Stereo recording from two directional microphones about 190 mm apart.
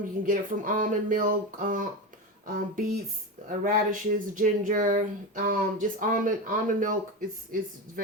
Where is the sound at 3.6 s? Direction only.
40° right (ahead or behind).